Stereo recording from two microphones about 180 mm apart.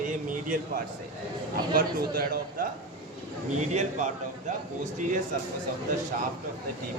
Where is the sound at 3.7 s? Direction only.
40° right (ahead or behind).